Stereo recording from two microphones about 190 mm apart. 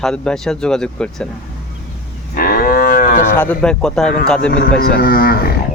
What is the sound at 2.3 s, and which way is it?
Cattle, 50° left (ahead or behind).